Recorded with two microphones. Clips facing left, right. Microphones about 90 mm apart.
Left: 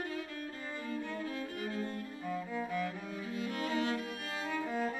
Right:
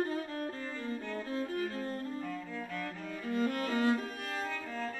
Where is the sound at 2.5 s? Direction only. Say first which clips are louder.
Left 4 dB; 15° left (ahead or behind).